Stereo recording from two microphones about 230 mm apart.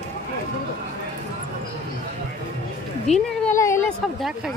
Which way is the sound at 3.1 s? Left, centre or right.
Left.